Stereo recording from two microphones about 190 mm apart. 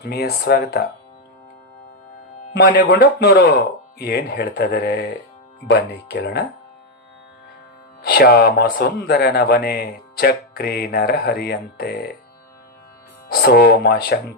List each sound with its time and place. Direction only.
0.0 s speech: 60° left (ahead or behind)
2.6 s speech: 55° left (ahead or behind)
8.0 s speech: 55° left (ahead or behind)
13.2 s speech: 55° left (ahead or behind)